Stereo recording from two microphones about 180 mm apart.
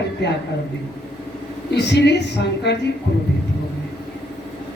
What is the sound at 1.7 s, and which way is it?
A woman's voice, 70° left (ahead or behind).